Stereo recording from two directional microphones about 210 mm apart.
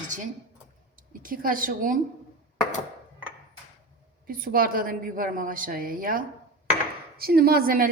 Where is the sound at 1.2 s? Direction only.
40° right (ahead or behind).